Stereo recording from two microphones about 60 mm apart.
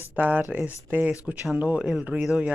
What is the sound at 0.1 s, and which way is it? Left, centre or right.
Speech, right.